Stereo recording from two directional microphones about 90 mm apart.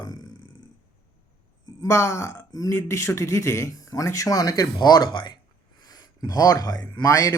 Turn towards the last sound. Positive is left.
turn(degrees=35)  # may be behind; listen again after turning